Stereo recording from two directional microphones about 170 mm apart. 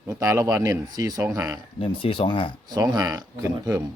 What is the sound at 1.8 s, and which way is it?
Speech, 30° left (ahead or behind).